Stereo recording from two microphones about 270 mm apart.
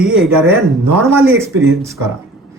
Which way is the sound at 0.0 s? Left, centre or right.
Centre.